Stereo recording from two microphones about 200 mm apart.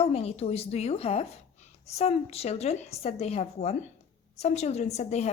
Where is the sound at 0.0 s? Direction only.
30° left (ahead or behind).